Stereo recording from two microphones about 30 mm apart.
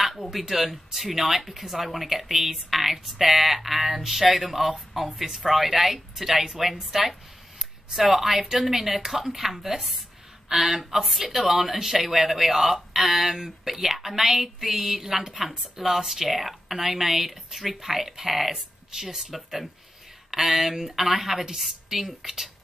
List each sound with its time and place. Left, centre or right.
0.0 s speech: centre
19.3 s speech: centre